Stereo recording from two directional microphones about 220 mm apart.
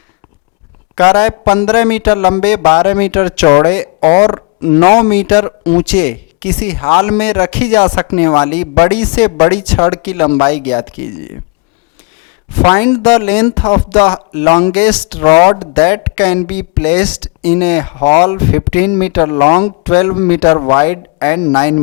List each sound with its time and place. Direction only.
0.9 s speech: 20° left (ahead or behind)
6.4 s speech: 10° left (ahead or behind)
12.6 s speech: 20° left (ahead or behind)
14.9 s speech: 5° left (ahead or behind)
15.2 s speech: 25° left (ahead or behind)
19.3 s speech: 25° left (ahead or behind)